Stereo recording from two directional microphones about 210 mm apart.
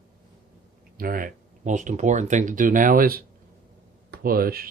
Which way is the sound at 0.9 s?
45° right (ahead or behind).